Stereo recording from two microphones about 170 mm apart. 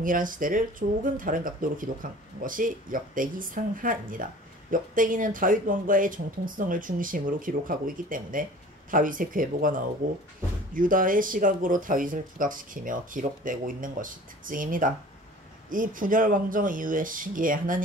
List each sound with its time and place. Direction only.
0.0 s speech: 55° right (ahead or behind)